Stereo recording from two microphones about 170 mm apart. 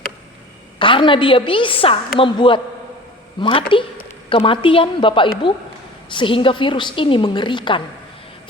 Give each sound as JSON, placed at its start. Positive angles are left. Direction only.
{"t": 0.8, "sound": "a woman's voice", "side_deg": 30}